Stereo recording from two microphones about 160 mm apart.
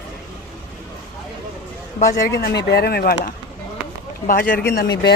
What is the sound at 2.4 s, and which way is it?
Speech, 80° left.